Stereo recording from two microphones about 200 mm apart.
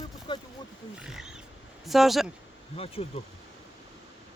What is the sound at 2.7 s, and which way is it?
Speech, 30° left (ahead or behind).